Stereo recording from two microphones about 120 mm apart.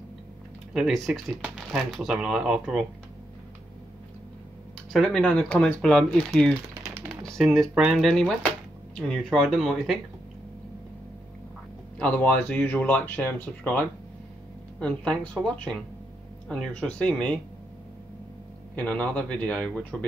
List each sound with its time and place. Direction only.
0.7 s speech: centre (ahead or behind)
4.9 s speech: 5° left (ahead or behind)
12.0 s speech: 10° left (ahead or behind)
18.8 s speech: 10° left (ahead or behind)